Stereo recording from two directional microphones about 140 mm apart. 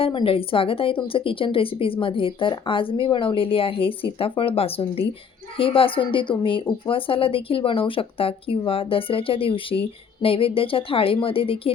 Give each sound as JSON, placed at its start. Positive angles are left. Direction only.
{"t": 0.0, "sound": "a woman's voice", "side_deg": 40}